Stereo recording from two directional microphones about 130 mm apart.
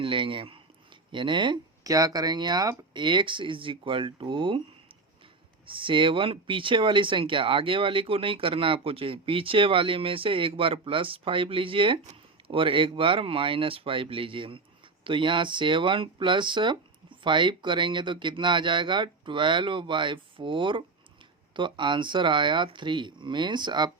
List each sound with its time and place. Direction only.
0.0 s speech: 40° right (ahead or behind)
1.8 s speech: 25° right (ahead or behind)
5.6 s speech: 40° right (ahead or behind)